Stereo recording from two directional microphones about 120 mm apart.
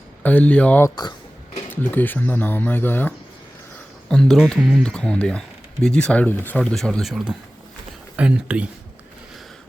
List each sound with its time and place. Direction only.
0.2 s speech: 15° left (ahead or behind)
0.9 s speech: 35° left (ahead or behind)
1.7 s speech: 15° left (ahead or behind)
4.1 s speech: 5° left (ahead or behind)